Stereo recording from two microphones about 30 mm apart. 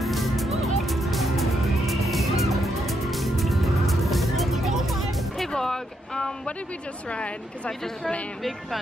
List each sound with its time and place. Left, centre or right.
0.0 s music: centre
5.6 s vehicle: centre
7.1 s a woman's voice: left